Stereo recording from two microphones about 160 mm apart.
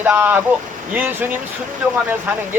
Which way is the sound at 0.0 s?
10° right (ahead or behind).